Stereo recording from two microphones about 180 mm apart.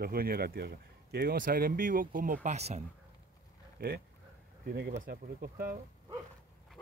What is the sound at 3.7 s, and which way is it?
Speech, 60° right (ahead or behind).